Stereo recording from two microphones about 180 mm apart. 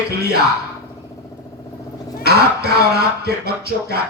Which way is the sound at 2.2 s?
60° right (ahead or behind).